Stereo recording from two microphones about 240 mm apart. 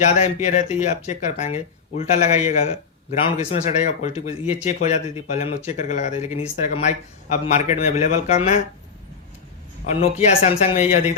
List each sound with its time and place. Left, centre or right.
0.0 s speech: left
9.8 s speech: left